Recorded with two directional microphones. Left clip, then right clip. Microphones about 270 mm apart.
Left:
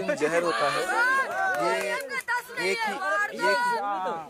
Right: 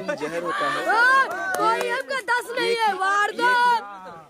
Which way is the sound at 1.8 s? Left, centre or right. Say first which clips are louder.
Right 4 dB; right.